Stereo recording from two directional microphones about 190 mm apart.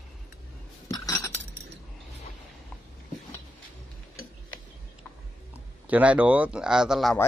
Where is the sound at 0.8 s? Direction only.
15° left (ahead or behind).